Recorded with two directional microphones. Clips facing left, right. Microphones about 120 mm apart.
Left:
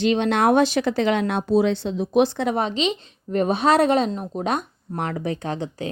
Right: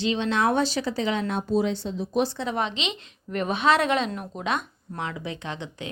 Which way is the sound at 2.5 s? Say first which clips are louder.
Left 6 dB; 40° left (ahead or behind).